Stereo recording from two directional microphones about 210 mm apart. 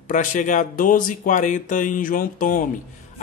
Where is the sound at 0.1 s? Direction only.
35° left (ahead or behind).